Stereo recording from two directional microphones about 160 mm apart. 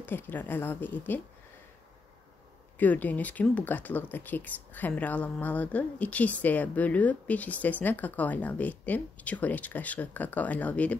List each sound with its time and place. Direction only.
0.0 s speech: 10° left (ahead or behind)
2.8 s speech: 10° left (ahead or behind)